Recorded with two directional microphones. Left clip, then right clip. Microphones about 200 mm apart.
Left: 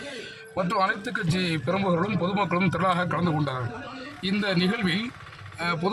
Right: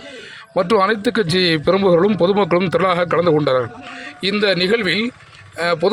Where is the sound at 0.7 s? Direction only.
30° right (ahead or behind).